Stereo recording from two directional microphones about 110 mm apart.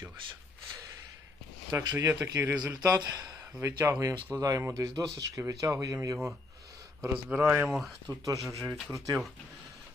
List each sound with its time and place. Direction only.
1.7 s speech: 30° right (ahead or behind)
2.7 s speech: 35° right (ahead or behind)
3.6 s speech: 25° right (ahead or behind)
7.0 s a man's voice: 10° right (ahead or behind)
7.7 s speech: centre (ahead or behind)
8.2 s speech: 30° right (ahead or behind)